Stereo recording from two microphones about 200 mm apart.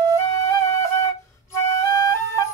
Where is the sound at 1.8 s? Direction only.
15° left (ahead or behind).